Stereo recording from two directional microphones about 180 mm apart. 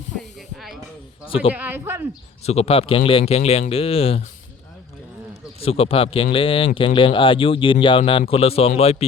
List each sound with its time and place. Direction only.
0.2 s snake: centre (ahead or behind)
1.5 s speech: 10° right (ahead or behind)
2.5 s speech: 35° left (ahead or behind)
5.5 s speech: 30° left (ahead or behind)